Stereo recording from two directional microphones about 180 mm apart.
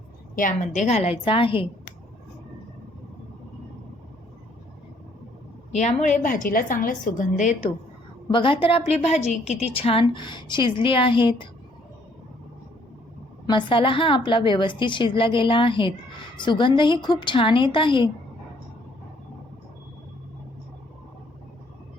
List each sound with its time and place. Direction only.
0.3 s a woman's voice: 45° left (ahead or behind); by 1.6 s 30° left (ahead or behind)
5.7 s a woman's voice: 40° left (ahead or behind)
8.3 s a woman's voice: 30° left (ahead or behind)
13.5 s speech: 25° left (ahead or behind)